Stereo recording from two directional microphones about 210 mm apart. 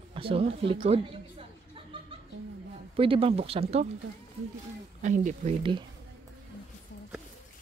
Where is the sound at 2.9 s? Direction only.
25° right (ahead or behind).